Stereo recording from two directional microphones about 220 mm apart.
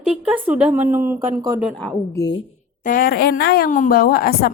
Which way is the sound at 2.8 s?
40° left (ahead or behind).